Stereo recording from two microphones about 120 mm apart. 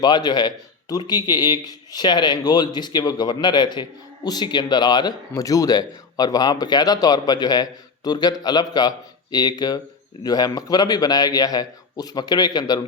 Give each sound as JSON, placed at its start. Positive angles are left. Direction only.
{"t": 0.0, "sound": "speech", "side_deg": 35}